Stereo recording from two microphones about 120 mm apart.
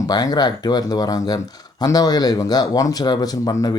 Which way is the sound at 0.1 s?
35° left (ahead or behind).